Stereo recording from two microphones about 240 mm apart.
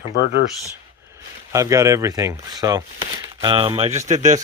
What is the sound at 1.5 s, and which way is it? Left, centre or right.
Speech, centre.